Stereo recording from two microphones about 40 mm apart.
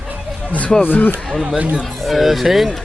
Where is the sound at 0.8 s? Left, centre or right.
Left.